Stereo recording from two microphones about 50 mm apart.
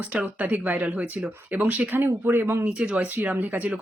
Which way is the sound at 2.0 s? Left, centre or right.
Right.